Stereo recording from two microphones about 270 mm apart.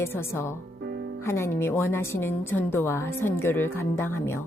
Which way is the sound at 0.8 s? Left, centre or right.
Right.